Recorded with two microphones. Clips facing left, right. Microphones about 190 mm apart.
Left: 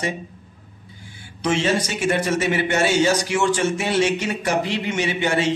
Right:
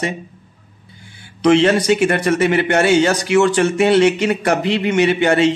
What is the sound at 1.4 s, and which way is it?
A man's voice, 65° right (ahead or behind).